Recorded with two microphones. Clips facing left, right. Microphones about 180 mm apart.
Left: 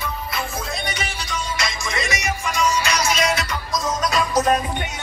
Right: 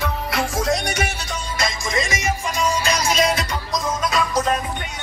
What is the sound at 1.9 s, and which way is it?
Music, 30° right (ahead or behind).